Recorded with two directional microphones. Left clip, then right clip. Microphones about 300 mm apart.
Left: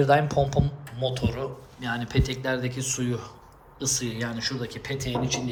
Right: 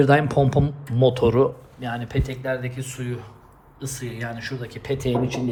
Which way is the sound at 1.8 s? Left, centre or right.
Centre.